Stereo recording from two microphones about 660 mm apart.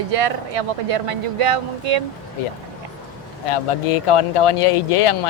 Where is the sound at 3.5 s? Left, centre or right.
Left.